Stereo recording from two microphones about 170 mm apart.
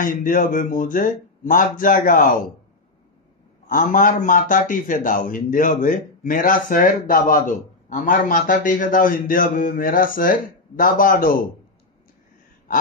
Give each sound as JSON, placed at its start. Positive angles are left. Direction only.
{"t": 0.0, "sound": "a man's voice", "side_deg": 50}
{"t": 3.6, "sound": "a man's voice", "side_deg": 55}